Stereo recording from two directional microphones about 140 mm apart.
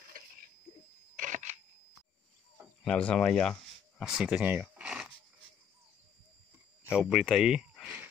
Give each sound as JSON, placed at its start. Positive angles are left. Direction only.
{"t": 0.2, "sound": "a sound", "side_deg": -90}
{"t": 0.7, "sound": "a sound", "side_deg": 35}
{"t": 1.1, "sound": "single-lens reflex camera", "side_deg": -65}
{"t": 2.8, "sound": "speech", "side_deg": 5}
{"t": 4.0, "sound": "speech", "side_deg": -5}
{"t": 6.8, "sound": "speech", "side_deg": -5}